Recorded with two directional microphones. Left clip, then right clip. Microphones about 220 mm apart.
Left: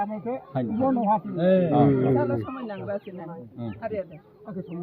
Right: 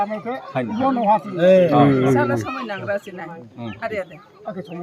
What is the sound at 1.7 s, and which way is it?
Speech, 55° right (ahead or behind).